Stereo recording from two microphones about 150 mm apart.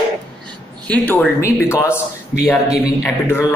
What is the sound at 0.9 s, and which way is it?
Speech, 10° left (ahead or behind).